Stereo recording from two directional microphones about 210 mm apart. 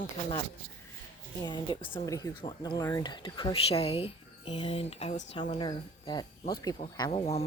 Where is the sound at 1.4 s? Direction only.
20° left (ahead or behind).